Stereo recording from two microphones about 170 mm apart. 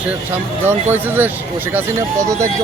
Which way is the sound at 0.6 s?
10° right (ahead or behind).